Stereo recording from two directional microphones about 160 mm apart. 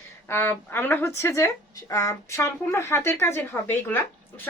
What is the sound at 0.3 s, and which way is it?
A woman's voice, 15° left (ahead or behind).